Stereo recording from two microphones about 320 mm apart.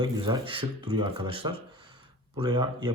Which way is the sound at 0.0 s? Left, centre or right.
Centre.